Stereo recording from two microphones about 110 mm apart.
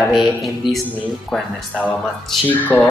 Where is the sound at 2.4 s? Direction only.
15° left (ahead or behind).